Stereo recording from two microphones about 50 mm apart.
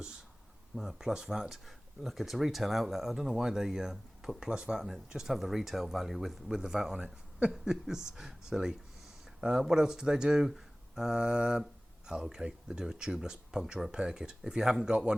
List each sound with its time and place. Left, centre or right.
0.8 s speech: centre
7.0 s speech: right
7.5 s speech: centre